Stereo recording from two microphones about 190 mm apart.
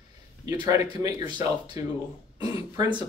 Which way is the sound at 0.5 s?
20° right (ahead or behind).